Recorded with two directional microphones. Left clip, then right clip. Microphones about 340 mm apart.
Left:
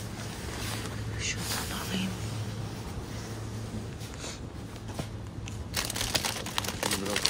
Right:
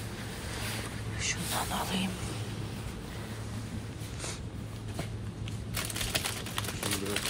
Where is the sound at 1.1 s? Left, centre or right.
Centre.